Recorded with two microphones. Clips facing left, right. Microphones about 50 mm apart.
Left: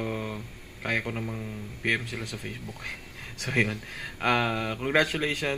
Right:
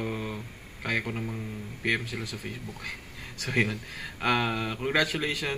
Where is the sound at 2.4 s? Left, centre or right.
Left.